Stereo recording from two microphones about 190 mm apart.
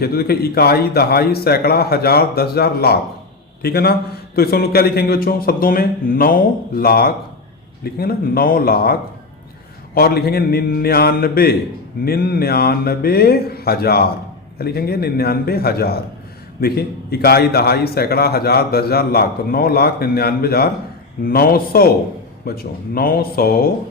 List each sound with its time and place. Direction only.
0.0 s a man's voice: 55° left (ahead or behind)